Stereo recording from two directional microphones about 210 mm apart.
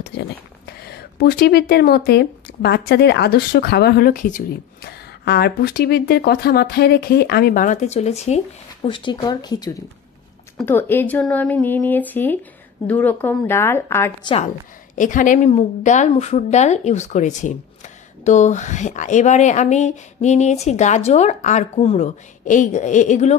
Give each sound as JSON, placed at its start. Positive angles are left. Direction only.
{"t": 0.1, "sound": "a sound", "side_deg": 55}
{"t": 0.7, "sound": "speech", "side_deg": 50}
{"t": 14.2, "sound": "speech", "side_deg": 25}
{"t": 15.0, "sound": "a woman's voice", "side_deg": 40}